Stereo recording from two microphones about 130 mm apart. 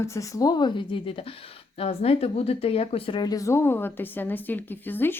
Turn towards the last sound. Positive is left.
turn(degrees=15)  # may be behind; listen again after turning